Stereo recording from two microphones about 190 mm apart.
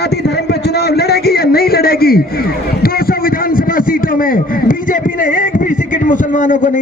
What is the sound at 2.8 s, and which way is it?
A man's voice, 50° left (ahead or behind).